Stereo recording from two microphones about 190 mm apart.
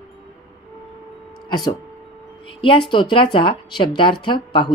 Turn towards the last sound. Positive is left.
turn(degrees=25)  # may be behind; listen again after turning